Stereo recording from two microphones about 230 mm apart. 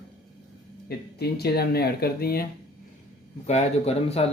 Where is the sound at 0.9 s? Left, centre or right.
Left.